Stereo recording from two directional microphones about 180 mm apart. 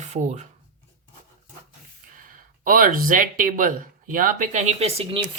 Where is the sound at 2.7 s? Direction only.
50° right (ahead or behind).